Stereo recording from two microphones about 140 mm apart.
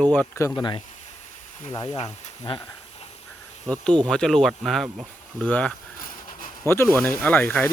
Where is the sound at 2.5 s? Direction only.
40° left (ahead or behind).